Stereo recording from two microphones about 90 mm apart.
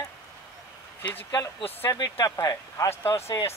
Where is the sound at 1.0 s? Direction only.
20° left (ahead or behind).